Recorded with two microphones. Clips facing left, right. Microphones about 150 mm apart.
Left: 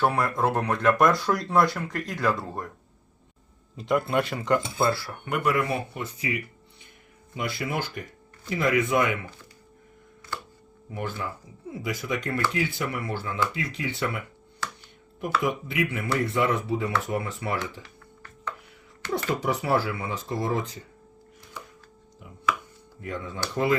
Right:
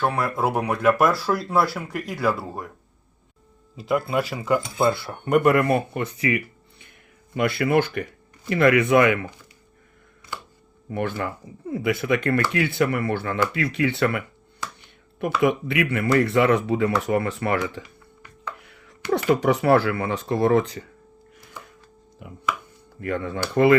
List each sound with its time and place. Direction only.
0.0 s speech: centre (ahead or behind)
3.8 s speech: centre (ahead or behind)
4.8 s speech: 20° right (ahead or behind)
5.4 s speech: 55° right (ahead or behind)
10.9 s speech: 65° right (ahead or behind)
15.4 s speech: 70° right (ahead or behind)
19.3 s speech: 65° right (ahead or behind)
23.0 s speech: 65° right (ahead or behind)